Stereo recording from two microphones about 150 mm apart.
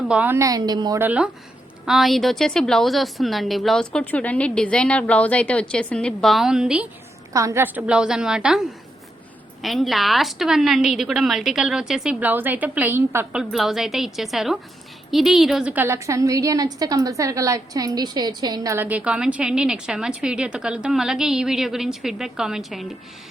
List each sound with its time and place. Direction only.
0.1 s a woman's voice: 10° right (ahead or behind)
0.4 s a woman's voice: 25° right (ahead or behind)
0.9 s a woman's voice: 10° right (ahead or behind)
7.3 s a woman's voice: 20° right (ahead or behind); by 23.0 s centre (ahead or behind)